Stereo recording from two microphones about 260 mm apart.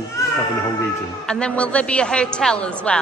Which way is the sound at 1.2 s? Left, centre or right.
Centre.